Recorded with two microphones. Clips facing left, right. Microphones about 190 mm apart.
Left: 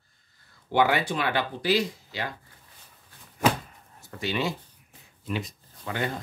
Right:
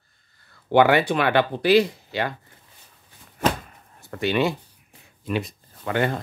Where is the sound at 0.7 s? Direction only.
65° right (ahead or behind).